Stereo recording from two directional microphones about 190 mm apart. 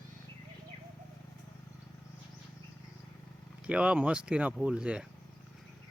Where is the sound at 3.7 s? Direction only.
5° right (ahead or behind).